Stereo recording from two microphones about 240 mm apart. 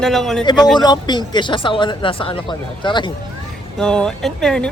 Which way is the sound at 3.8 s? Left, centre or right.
Centre.